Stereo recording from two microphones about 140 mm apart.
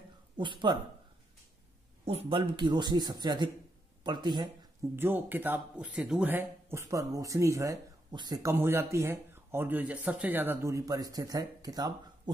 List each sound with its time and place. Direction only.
0.4 s speech: 35° right (ahead or behind)
2.0 s speech: 40° right (ahead or behind)
4.9 s speech: 15° right (ahead or behind)
8.1 s speech: 30° right (ahead or behind)
8.4 s speech: 20° right (ahead or behind)